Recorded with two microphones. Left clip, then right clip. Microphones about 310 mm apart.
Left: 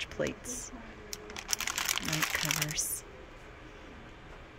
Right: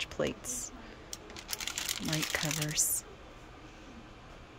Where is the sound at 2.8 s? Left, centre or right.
Right.